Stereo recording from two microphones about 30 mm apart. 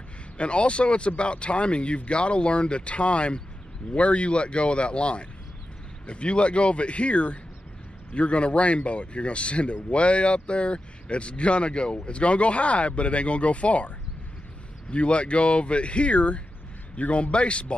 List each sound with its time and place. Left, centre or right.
0.4 s speech: left